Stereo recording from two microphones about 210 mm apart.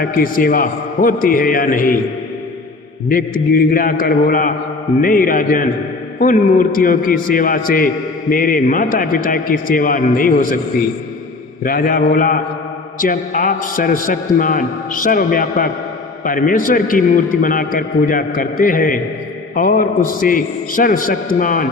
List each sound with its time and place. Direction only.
0.0 s a man's voice: 40° left (ahead or behind)
3.1 s a man's voice: 40° left (ahead or behind)
11.6 s a man's voice: 45° left (ahead or behind)